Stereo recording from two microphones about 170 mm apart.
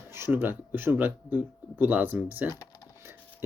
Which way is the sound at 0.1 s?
10° right (ahead or behind).